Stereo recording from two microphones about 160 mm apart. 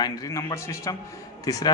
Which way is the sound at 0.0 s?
20° left (ahead or behind).